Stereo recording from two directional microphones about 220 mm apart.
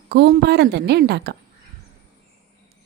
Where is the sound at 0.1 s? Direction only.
45° right (ahead or behind).